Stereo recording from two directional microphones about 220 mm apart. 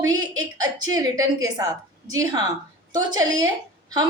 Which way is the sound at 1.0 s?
15° right (ahead or behind).